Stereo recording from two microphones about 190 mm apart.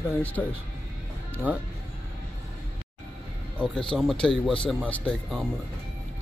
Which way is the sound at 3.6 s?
5° left (ahead or behind).